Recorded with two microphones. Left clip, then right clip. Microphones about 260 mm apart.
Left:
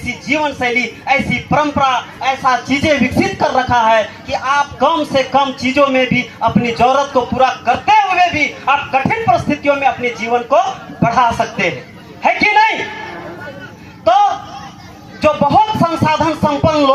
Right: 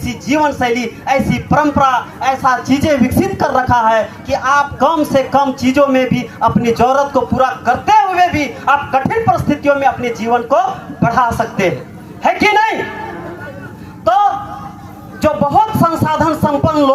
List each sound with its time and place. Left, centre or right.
0.0 s a man's voice: left
15.2 s music: left